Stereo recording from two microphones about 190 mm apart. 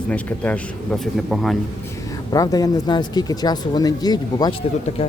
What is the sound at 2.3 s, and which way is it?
Speech, 20° left (ahead or behind).